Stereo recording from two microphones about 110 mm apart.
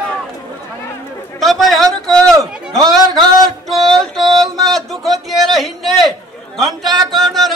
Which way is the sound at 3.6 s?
Centre (ahead or behind).